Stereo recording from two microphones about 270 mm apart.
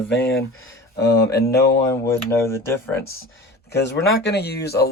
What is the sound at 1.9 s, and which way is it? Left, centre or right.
Speech, centre.